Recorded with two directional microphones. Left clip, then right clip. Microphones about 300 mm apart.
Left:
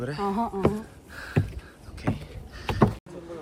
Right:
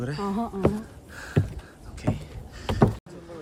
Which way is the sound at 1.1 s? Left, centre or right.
Centre.